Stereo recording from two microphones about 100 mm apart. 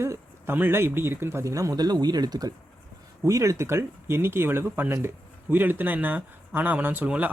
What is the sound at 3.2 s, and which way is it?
Speech, 30° right (ahead or behind).